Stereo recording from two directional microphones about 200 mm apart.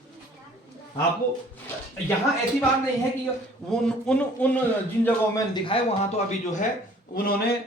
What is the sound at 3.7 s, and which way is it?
Speech, 5° left (ahead or behind).